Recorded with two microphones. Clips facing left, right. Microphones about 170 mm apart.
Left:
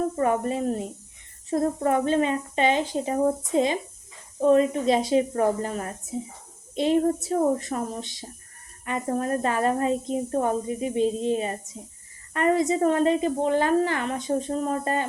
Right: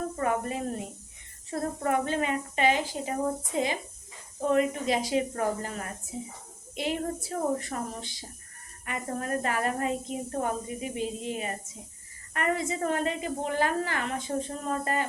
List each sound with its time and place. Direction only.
0.2 s a woman's voice: 30° left (ahead or behind)